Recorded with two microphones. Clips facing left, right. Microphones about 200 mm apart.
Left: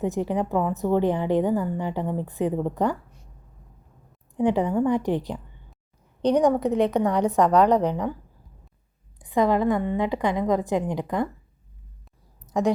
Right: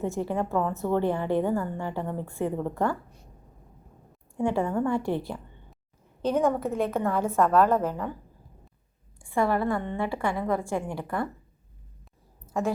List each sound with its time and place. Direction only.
0.0 s a woman's voice: 15° left (ahead or behind)
4.4 s a woman's voice: 20° left (ahead or behind)
9.1 s a woman's voice: 20° left (ahead or behind)
12.5 s a woman's voice: 15° left (ahead or behind)